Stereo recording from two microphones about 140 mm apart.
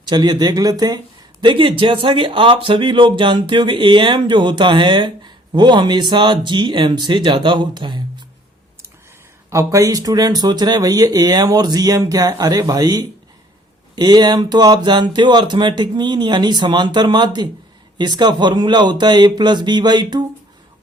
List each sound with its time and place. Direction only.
0.0 s speech: 30° right (ahead or behind)
9.5 s speech: 20° right (ahead or behind)